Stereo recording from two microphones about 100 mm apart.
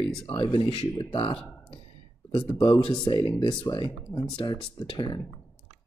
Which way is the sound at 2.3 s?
50° left (ahead or behind).